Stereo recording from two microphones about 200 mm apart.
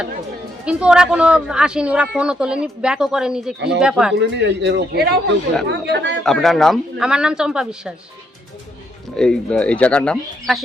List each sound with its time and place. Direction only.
0.6 s speech: 5° right (ahead or behind)
4.2 s a man's voice: 60° right (ahead or behind)
6.2 s speech: centre (ahead or behind)
9.1 s speech: 5° left (ahead or behind)